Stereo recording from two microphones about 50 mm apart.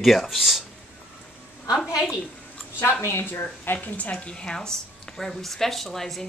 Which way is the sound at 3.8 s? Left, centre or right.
Left.